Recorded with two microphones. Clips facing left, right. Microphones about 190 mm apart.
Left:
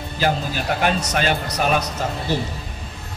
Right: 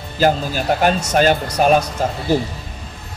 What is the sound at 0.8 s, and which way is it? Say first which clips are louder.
Speech: right 6 dB; 40° right (ahead or behind).